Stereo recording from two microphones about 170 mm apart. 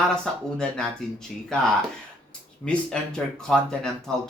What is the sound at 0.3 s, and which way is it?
Speech, centre (ahead or behind).